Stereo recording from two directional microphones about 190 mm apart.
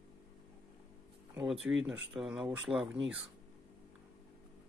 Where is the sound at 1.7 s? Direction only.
85° right.